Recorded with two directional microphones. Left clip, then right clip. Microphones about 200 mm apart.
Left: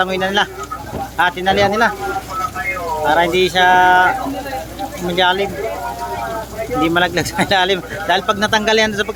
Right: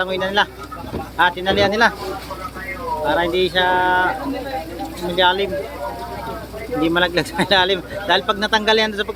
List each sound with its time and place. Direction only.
0.0 s speech: 10° left (ahead or behind)
3.0 s speech: 10° left (ahead or behind)
6.8 s speech: 10° left (ahead or behind)